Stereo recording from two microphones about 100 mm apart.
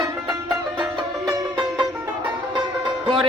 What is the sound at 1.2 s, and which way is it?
Music, 45° right (ahead or behind).